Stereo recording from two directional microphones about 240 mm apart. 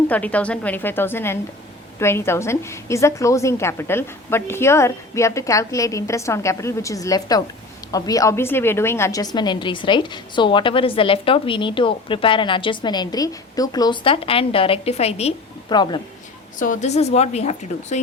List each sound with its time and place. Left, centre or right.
0.1 s a woman's voice: centre
16.6 s a woman's voice: left